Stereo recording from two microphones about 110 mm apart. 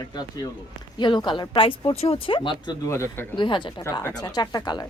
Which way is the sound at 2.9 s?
25° left (ahead or behind).